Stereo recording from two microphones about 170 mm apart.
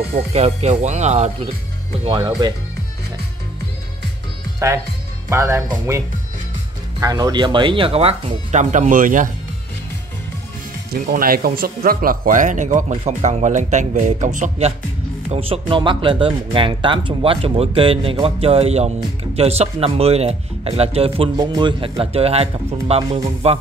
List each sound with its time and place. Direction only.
0.3 s speech: 40° right (ahead or behind)
2.0 s speech: 25° right (ahead or behind)
5.3 s speech: 15° right (ahead or behind); by 9.3 s 50° right (ahead or behind)
10.9 s speech: 60° right (ahead or behind)
15.3 s speech: 35° right (ahead or behind)